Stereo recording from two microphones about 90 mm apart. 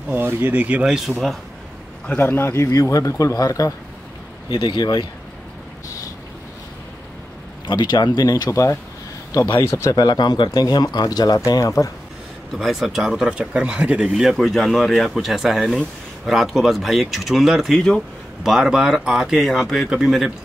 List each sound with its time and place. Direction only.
0.1 s speech: 25° right (ahead or behind)
0.9 s speech: centre (ahead or behind)
2.1 s a man's voice: 25° left (ahead or behind); by 3.7 s 40° left (ahead or behind)
4.5 s speech: 65° left (ahead or behind)
7.6 s speech: 50° left (ahead or behind); by 11.9 s 35° left (ahead or behind)
12.5 s speech: centre (ahead or behind)
18.5 s speech: 5° right (ahead or behind)